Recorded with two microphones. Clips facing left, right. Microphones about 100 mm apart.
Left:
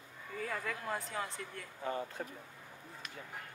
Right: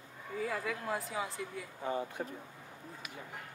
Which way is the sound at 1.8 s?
15° right (ahead or behind).